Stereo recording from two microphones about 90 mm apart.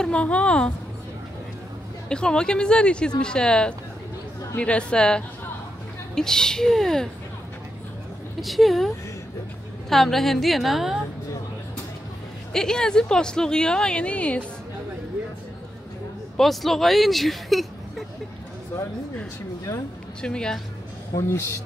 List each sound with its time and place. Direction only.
0.0 s speech: 10° left (ahead or behind)
2.0 s speech: 10° left (ahead or behind)
8.4 s a woman's voice: centre (ahead or behind)
12.5 s speech: 5° left (ahead or behind)
16.3 s speech: centre (ahead or behind)
20.2 s speech: 10° left (ahead or behind)
21.3 s a man's voice: 30° left (ahead or behind)